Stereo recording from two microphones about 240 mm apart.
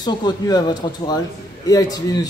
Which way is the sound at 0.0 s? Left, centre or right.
Centre.